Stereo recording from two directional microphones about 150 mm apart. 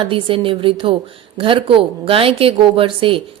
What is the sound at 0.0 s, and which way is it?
A woman's voice, 35° right (ahead or behind).